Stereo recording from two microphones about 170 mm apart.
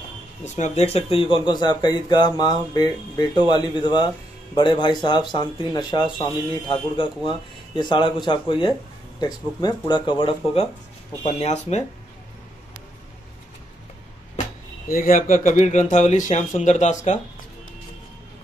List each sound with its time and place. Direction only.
0.6 s speech: 40° left (ahead or behind)
14.9 s speech: 55° left (ahead or behind)